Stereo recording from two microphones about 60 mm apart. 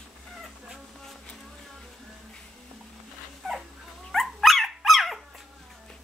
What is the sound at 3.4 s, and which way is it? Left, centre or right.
Dog, centre.